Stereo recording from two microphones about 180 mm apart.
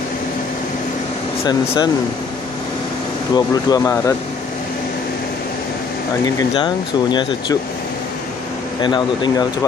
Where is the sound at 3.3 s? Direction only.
20° left (ahead or behind).